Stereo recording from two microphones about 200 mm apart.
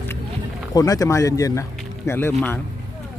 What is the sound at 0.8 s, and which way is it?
Speech, 15° left (ahead or behind).